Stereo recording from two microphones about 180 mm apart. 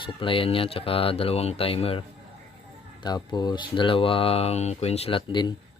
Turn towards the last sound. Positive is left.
turn(degrees=25)  # may be behind; listen again after turning